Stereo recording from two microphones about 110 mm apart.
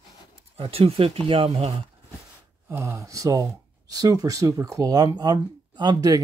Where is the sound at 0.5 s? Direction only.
60° right (ahead or behind).